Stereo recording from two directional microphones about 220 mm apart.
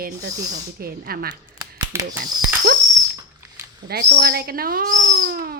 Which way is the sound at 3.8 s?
45° right (ahead or behind).